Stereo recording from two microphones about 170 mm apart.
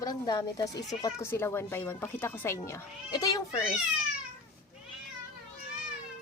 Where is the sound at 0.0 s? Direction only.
25° left (ahead or behind).